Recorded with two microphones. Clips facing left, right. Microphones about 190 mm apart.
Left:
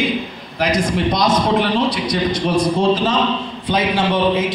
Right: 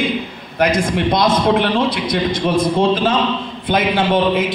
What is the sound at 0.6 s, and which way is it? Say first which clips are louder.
A man's voice: right 2 dB; 55° right (ahead or behind).